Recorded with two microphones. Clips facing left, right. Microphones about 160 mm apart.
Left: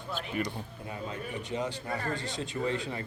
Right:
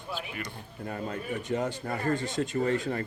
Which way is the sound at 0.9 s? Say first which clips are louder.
Right 4 dB; 50° right (ahead or behind).